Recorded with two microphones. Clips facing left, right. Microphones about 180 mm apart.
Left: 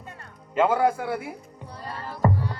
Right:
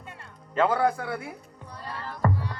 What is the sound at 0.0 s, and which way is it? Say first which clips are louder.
Music: left 2 dB; 40° left (ahead or behind).